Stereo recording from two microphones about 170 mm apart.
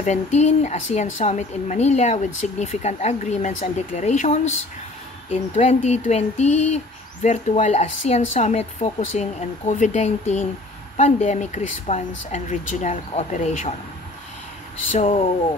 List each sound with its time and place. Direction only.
0.0 s a woman's voice: 40° left (ahead or behind)
14.9 s a woman's voice: 40° left (ahead or behind)